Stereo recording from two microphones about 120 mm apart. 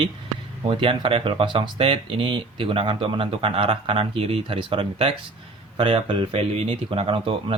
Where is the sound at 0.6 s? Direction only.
45° right (ahead or behind).